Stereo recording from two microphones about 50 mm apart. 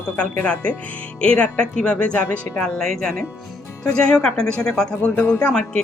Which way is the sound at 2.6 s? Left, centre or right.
Centre.